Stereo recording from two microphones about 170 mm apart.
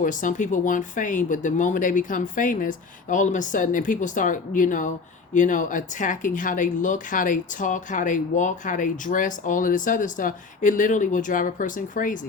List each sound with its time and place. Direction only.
0.0 s speech: 50° left (ahead or behind)